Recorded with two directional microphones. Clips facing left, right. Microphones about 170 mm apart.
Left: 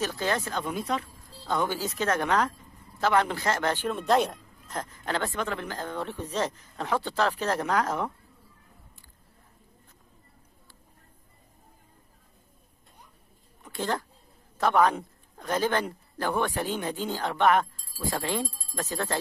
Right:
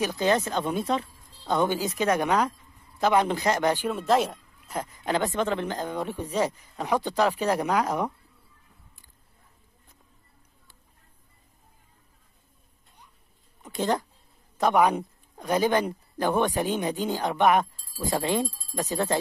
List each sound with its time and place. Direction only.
0.0 s speech: 15° right (ahead or behind)
13.7 s speech: 20° right (ahead or behind)